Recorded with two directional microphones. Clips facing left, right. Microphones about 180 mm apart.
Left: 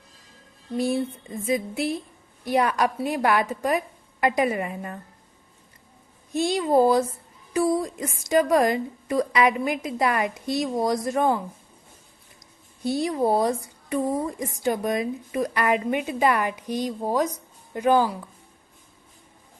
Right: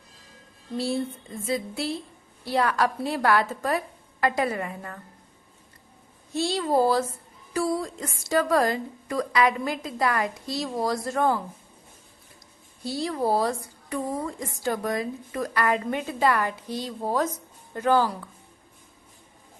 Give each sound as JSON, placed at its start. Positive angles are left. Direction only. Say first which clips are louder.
{"t": 0.8, "sound": "a woman's voice", "louder": "left 3 dB", "side_deg": 20}
{"t": 6.3, "sound": "a woman's voice", "louder": "left 3 dB", "side_deg": 15}
{"t": 12.8, "sound": "a woman's voice", "louder": "left 4 dB", "side_deg": 20}